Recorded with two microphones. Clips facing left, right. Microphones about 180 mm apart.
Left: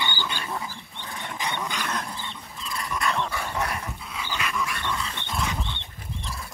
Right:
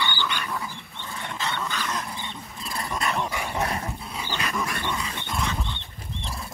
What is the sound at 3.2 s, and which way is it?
Dog, 10° right (ahead or behind).